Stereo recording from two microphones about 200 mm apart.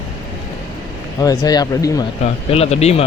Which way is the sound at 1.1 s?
20° left (ahead or behind).